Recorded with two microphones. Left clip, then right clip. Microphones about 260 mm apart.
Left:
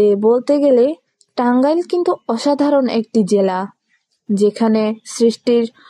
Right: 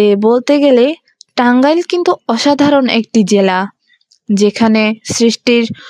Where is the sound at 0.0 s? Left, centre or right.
Right.